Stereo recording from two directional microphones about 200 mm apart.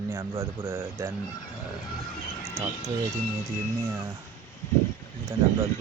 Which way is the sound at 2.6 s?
15° right (ahead or behind).